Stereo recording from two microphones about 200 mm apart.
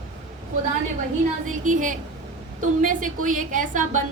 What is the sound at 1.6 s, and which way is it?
A woman's voice, 40° right (ahead or behind).